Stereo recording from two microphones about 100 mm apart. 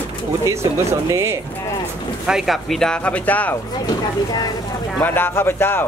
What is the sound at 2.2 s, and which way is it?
Speech, 5° right (ahead or behind).